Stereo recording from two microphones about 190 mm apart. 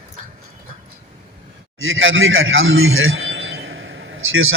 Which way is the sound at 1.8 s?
90° right.